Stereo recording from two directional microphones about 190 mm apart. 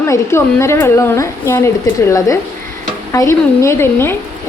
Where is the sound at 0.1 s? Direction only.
15° left (ahead or behind).